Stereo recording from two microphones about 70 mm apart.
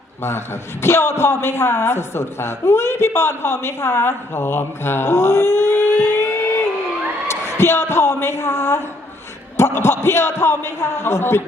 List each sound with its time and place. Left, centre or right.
0.2 s a man's voice: left